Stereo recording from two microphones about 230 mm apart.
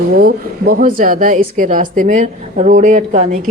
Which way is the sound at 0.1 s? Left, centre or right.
Right.